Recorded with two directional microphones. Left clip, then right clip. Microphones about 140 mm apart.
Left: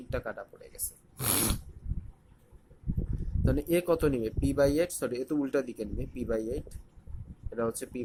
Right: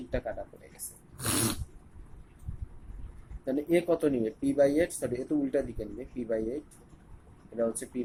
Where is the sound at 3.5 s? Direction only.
90° left.